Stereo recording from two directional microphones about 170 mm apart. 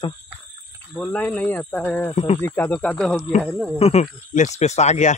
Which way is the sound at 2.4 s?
10° left (ahead or behind).